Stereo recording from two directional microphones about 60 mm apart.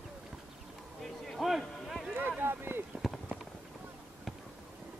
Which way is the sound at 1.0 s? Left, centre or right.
Centre.